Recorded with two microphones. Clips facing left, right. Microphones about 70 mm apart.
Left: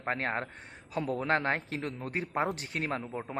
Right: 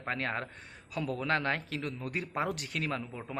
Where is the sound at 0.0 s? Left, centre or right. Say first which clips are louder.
Left 2 dB; left.